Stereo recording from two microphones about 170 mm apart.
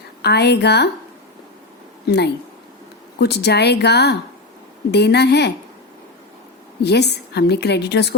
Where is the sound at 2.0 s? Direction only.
80° left.